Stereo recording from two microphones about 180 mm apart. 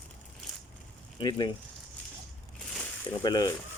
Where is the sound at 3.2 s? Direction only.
20° left (ahead or behind).